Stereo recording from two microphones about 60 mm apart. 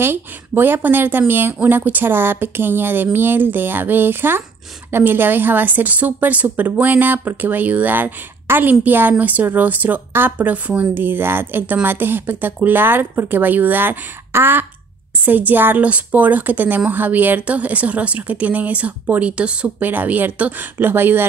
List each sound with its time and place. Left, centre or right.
0.0 s a woman's voice: right
11.1 s a woman's voice: right
19.9 s speech: right
20.7 s a woman's voice: right